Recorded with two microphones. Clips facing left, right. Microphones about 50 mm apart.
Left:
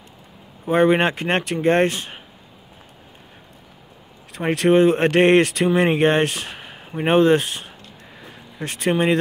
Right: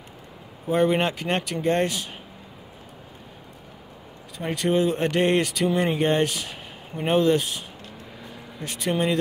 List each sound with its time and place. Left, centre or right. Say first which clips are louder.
0.7 s speech: left 5 dB; left
4.4 s speech: left 7 dB; left
8.6 s speech: left 5 dB; left